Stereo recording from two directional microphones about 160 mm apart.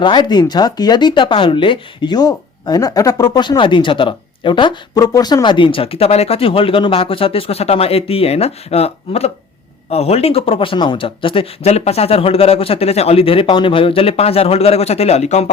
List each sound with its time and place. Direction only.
0.0 s speech: 30° left (ahead or behind)